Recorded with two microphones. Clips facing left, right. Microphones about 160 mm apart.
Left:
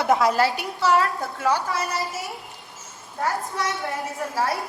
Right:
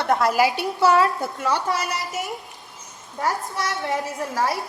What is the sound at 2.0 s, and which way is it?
Speech, 80° right.